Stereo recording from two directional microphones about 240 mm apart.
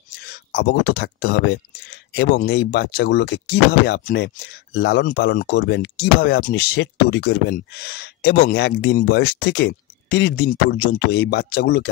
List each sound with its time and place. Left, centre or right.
0.2 s speech: left